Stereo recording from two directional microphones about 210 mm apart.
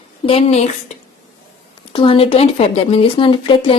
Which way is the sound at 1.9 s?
25° left (ahead or behind).